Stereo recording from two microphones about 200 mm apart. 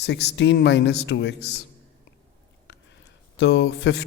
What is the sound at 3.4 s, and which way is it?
Speech, 60° left (ahead or behind).